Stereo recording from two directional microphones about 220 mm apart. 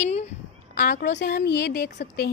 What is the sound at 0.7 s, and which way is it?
A woman's voice, 40° left (ahead or behind).